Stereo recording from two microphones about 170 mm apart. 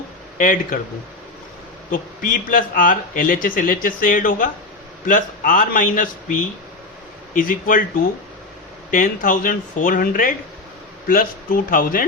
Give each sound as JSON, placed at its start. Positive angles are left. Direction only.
{"t": 0.3, "sound": "speech", "side_deg": 55}
{"t": 1.9, "sound": "speech", "side_deg": 55}